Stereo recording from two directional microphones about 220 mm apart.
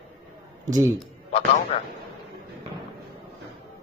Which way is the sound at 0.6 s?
15° right (ahead or behind).